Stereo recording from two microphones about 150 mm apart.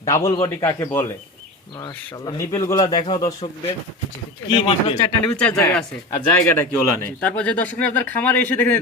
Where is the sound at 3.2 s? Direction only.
40° left (ahead or behind).